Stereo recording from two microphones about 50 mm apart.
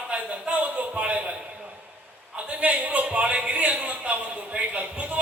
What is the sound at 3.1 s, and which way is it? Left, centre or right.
Speech, right.